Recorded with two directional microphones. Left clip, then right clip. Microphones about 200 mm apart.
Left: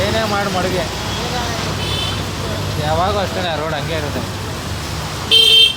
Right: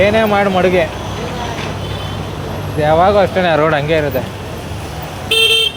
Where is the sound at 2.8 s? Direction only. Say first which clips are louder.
Right 8 dB; 55° right (ahead or behind).